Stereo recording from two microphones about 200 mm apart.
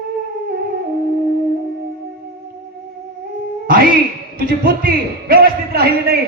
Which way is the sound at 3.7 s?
45° right (ahead or behind).